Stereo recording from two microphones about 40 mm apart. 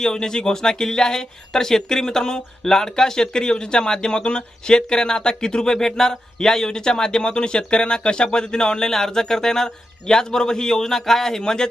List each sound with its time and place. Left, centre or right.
0.0 s speech: centre